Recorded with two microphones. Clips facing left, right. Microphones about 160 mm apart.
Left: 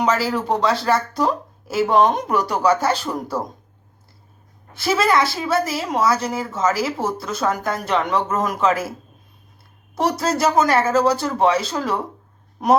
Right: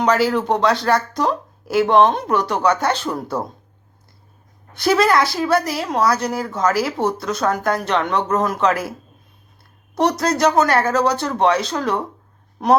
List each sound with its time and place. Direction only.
0.0 s a woman's voice: centre (ahead or behind)
4.7 s a woman's voice: centre (ahead or behind)
9.9 s a woman's voice: 5° left (ahead or behind)